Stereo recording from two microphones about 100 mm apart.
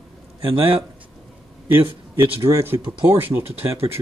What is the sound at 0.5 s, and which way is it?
Speech, 65° right (ahead or behind).